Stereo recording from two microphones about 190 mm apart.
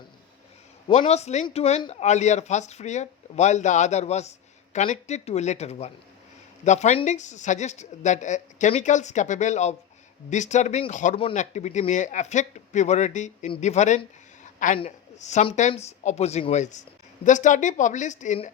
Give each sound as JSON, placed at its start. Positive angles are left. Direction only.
{"t": 0.9, "sound": "speech", "side_deg": 35}
{"t": 14.4, "sound": "a sound", "side_deg": 40}
{"t": 14.8, "sound": "speech", "side_deg": 35}